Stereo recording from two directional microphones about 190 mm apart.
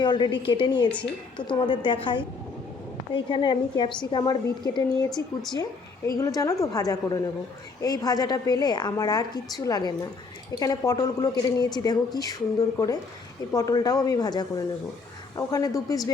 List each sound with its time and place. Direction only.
0.0 s a woman's voice: 25° left (ahead or behind)
5.1 s speech: centre (ahead or behind)
6.1 s a woman's voice: 15° left (ahead or behind)